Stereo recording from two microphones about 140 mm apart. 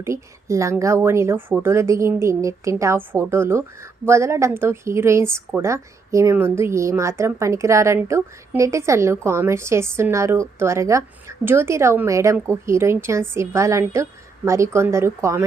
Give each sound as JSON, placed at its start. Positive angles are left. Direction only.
{"t": 0.0, "sound": "speech", "side_deg": -20}